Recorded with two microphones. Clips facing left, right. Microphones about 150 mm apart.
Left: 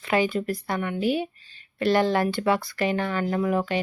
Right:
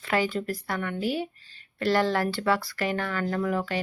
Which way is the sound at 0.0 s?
20° left (ahead or behind).